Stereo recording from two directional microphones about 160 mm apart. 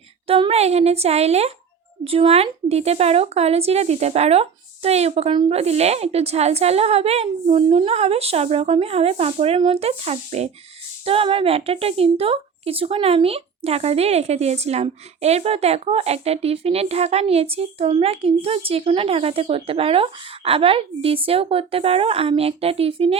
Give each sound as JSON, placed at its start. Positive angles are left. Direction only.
{"t": 0.3, "sound": "a woman's voice", "side_deg": -35}